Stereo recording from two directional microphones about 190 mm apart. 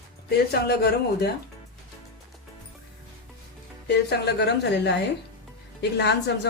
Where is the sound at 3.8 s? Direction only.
60° left (ahead or behind).